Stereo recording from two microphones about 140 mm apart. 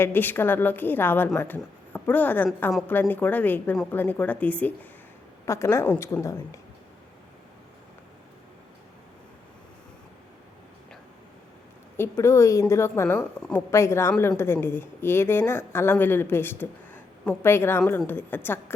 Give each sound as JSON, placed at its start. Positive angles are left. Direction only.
{"t": 0.0, "sound": "a woman's voice", "side_deg": 15}
{"t": 11.9, "sound": "a woman's voice", "side_deg": 20}
{"t": 13.1, "sound": "a woman's voice", "side_deg": 5}
{"t": 13.7, "sound": "a woman's voice", "side_deg": 20}